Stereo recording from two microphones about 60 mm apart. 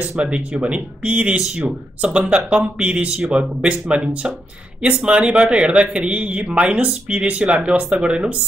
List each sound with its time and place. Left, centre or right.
0.2 s speech: centre
1.4 s speech: centre